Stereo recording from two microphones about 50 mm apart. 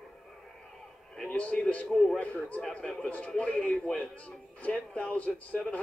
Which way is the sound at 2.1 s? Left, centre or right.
Left.